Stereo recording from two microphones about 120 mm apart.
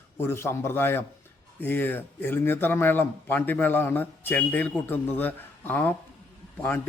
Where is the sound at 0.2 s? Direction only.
20° left (ahead or behind).